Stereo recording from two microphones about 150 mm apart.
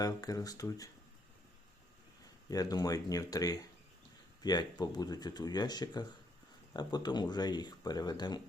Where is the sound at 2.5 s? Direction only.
25° left (ahead or behind).